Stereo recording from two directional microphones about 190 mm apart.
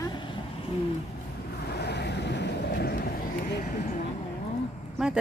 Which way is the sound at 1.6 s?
60° left (ahead or behind).